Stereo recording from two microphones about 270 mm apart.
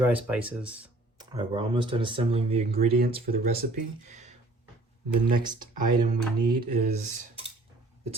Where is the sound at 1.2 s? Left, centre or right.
Centre; by 3.7 s right.